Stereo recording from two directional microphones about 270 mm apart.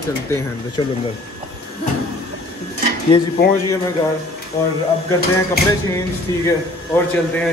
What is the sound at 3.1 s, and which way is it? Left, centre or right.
Speech, centre.